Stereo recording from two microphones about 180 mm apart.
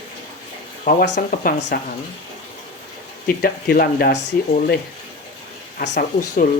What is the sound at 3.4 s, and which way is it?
Speech, 60° left (ahead or behind).